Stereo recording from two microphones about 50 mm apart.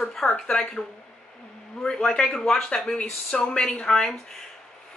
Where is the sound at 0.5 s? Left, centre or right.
Centre.